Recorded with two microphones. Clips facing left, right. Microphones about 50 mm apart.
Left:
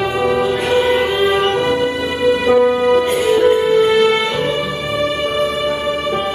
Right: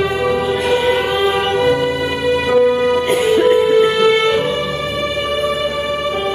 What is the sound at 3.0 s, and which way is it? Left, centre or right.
Music, right.